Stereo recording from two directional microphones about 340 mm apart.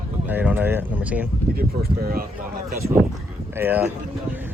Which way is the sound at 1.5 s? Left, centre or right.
Right.